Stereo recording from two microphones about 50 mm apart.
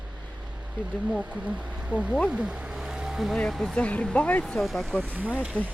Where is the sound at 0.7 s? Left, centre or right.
Right; by 3.3 s centre.